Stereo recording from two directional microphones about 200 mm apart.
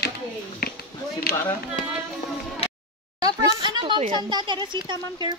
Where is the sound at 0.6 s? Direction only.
50° left (ahead or behind).